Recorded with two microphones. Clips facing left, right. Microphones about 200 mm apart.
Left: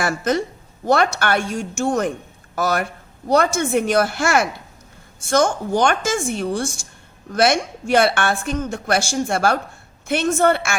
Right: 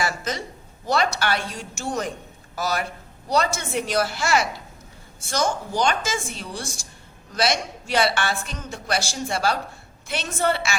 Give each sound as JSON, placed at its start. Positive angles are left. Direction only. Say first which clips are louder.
{"t": 0.0, "sound": "a woman's voice", "louder": "left 7 dB", "side_deg": 55}